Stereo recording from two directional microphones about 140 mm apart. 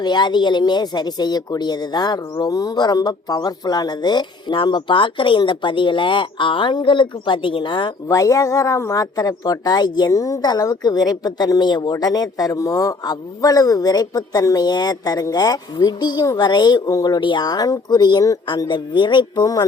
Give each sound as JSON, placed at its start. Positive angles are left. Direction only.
{"t": 0.0, "sound": "speech", "side_deg": 30}
{"t": 8.0, "sound": "a man's voice", "side_deg": 25}